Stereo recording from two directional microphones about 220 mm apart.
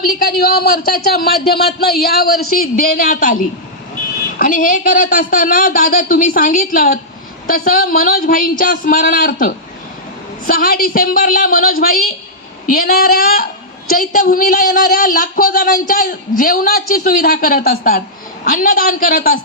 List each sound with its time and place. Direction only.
0.0 s speech: 40° left (ahead or behind)